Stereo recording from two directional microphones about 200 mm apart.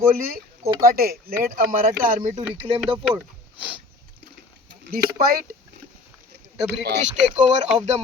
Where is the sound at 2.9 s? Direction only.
10° right (ahead or behind).